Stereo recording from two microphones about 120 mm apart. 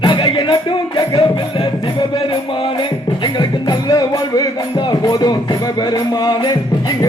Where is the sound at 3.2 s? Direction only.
35° left (ahead or behind).